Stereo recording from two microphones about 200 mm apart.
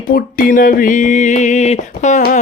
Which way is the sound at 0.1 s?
45° left (ahead or behind).